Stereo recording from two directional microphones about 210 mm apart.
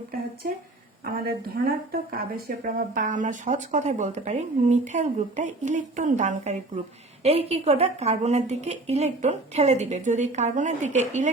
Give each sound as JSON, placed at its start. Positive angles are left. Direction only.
{"t": 1.0, "sound": "a woman's voice", "side_deg": -40}